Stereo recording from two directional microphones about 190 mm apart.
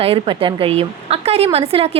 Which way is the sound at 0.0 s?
30° right (ahead or behind).